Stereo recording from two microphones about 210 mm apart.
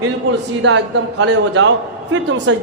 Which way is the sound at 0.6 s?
60° right (ahead or behind).